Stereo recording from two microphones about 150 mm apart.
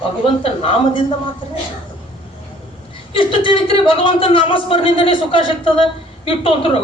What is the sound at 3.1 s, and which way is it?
Speech, 35° left (ahead or behind).